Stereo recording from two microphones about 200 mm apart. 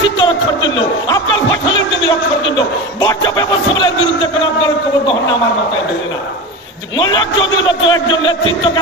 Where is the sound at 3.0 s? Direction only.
20° left (ahead or behind).